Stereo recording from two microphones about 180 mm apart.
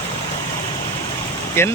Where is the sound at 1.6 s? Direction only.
15° left (ahead or behind).